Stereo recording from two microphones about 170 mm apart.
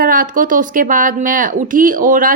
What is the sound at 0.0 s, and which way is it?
A woman's voice, 55° right (ahead or behind).